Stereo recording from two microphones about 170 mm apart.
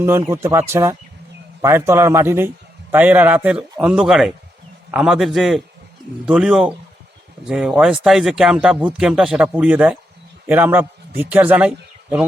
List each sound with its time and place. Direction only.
0.0 s speech: 15° right (ahead or behind)